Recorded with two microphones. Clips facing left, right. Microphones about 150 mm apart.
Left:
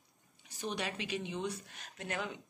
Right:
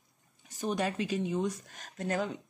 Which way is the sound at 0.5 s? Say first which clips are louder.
Right 7 dB; 45° right (ahead or behind).